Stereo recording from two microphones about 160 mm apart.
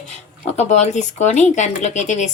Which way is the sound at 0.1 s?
45° left (ahead or behind).